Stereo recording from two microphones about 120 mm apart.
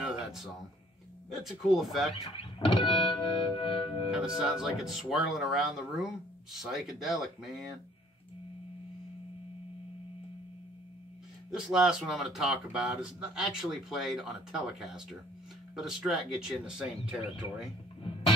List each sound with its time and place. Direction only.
0.0 s a sound: 5° right (ahead or behind)
1.3 s speech: centre (ahead or behind)
2.3 s music: 50° left (ahead or behind)
4.1 s speech: 5° right (ahead or behind)
11.5 s speech: 5° right (ahead or behind)